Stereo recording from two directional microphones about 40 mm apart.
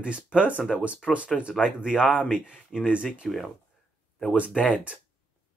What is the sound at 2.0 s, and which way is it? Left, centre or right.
Speech, left.